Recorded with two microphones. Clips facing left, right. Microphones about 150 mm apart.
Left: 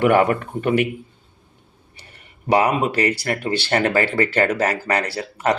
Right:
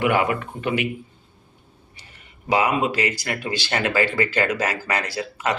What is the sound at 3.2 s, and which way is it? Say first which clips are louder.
Speech: left 5 dB; 35° left (ahead or behind).